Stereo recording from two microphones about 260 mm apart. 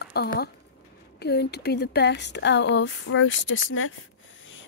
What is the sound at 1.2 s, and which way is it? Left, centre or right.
Speech, left.